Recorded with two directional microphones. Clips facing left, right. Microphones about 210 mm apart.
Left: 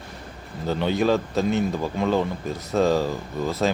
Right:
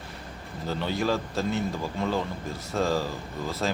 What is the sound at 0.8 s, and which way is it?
A man's voice, 20° left (ahead or behind).